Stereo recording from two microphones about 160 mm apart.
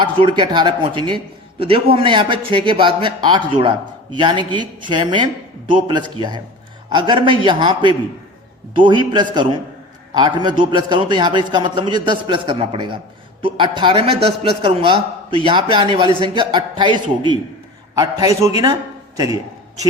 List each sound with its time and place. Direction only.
0.0 s a man's voice: 30° right (ahead or behind)